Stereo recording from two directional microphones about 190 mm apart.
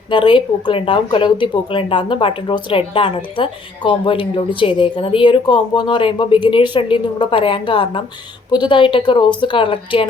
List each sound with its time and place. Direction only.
0.1 s speech: 25° left (ahead or behind)